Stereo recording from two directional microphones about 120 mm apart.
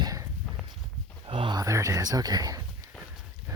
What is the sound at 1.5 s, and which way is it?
Speech, 25° right (ahead or behind).